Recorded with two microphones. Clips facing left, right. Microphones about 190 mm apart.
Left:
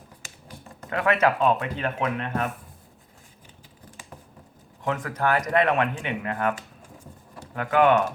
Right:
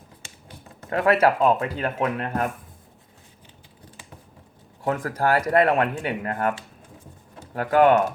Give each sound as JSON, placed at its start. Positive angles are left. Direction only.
{"t": 0.9, "sound": "speech", "side_deg": -30}
{"t": 1.5, "sound": "speech", "side_deg": -40}
{"t": 4.9, "sound": "speech", "side_deg": -40}
{"t": 7.5, "sound": "speech", "side_deg": -40}